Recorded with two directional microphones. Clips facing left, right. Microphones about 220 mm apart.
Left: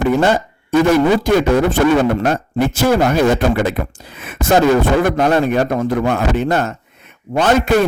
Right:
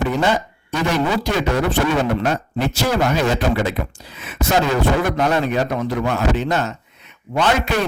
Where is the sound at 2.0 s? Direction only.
50° left (ahead or behind).